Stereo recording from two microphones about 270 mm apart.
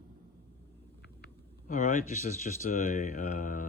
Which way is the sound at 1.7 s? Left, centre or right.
Left.